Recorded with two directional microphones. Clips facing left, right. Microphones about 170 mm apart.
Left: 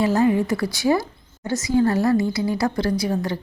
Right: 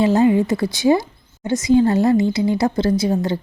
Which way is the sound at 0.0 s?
20° right (ahead or behind).